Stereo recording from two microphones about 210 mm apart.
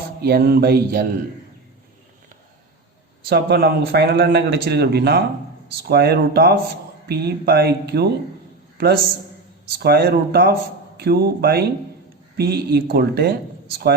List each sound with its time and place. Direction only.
0.2 s a man's voice: 50° right (ahead or behind)
3.2 s a man's voice: 50° right (ahead or behind)